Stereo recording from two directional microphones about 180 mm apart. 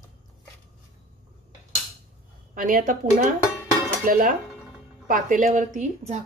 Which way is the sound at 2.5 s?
50° right (ahead or behind).